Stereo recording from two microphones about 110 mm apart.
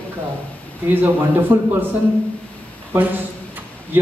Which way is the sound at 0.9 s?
20° right (ahead or behind).